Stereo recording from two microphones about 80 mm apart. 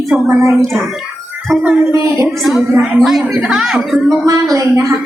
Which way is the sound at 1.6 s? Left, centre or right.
Right.